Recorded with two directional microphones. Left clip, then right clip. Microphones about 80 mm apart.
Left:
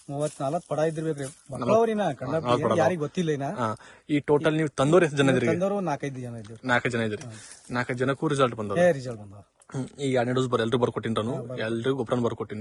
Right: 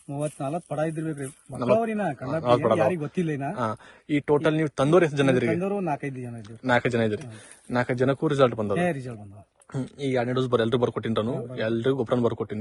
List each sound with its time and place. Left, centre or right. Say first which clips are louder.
0.1 s a man's voice: left 2 dB; left
1.5 s a man's voice: even; left
1.8 s a man's voice: left 3 dB; left
2.2 s a man's voice: right 5 dB; left
6.6 s a man's voice: right 2 dB; left
8.7 s a man's voice: left 4 dB; left
10.5 s a man's voice: right 1 dB; left